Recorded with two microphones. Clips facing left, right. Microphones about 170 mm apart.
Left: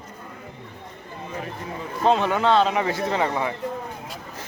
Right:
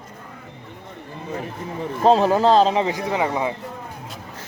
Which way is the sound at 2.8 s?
15° right (ahead or behind).